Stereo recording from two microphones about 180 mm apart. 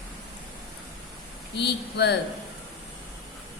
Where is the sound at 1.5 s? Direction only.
70° left (ahead or behind).